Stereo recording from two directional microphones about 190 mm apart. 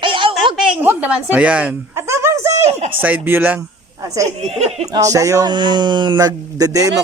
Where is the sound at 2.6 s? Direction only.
35° right (ahead or behind).